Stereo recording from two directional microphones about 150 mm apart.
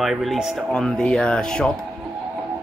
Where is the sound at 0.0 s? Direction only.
Centre (ahead or behind).